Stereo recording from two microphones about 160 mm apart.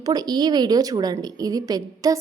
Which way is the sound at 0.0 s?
25° right (ahead or behind).